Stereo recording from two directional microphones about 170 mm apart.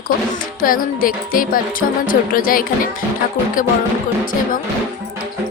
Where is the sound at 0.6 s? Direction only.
55° left (ahead or behind).